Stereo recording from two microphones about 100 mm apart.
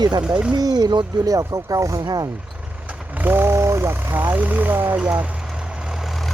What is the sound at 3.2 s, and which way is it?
Speech, 20° right (ahead or behind).